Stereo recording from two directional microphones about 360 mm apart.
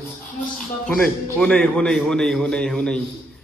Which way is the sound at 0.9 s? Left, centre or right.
Centre.